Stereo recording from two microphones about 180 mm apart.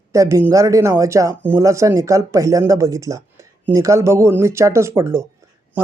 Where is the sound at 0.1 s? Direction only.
15° right (ahead or behind).